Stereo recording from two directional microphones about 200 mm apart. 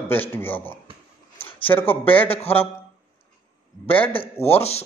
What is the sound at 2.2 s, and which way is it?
Speech, 30° left (ahead or behind).